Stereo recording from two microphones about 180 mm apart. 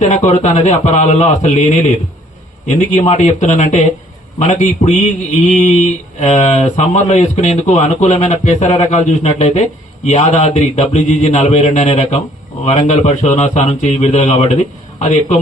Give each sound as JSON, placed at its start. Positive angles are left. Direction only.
{"t": 0.0, "sound": "speech", "side_deg": 40}
{"t": 2.6, "sound": "speech", "side_deg": 35}